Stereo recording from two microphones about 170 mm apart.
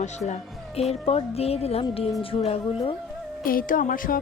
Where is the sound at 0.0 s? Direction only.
45° left (ahead or behind).